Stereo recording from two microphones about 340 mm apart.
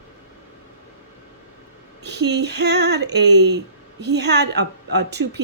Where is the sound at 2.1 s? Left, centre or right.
Right.